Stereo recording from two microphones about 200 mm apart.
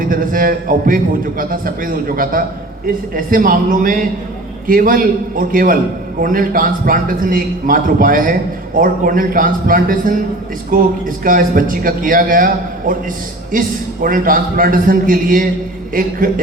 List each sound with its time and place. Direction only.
0.0 s a man's voice: 45° right (ahead or behind)
13.5 s a man's voice: 45° right (ahead or behind)